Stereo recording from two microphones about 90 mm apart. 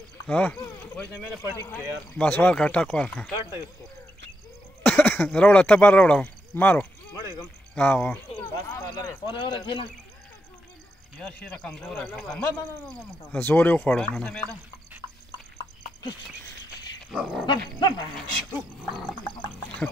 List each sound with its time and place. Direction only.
0.3 s speech: 15° left (ahead or behind)
1.7 s speech: 15° left (ahead or behind)
4.8 s speech: 20° left (ahead or behind)
8.6 s a man's voice: 45° left (ahead or behind)
9.3 s a man's voice: 70° left (ahead or behind)
11.1 s speech: 10° left (ahead or behind)
17.1 s dog: 5° right (ahead or behind)
17.5 s wild animals: 50° left (ahead or behind)
18.1 s speech: 5° left (ahead or behind)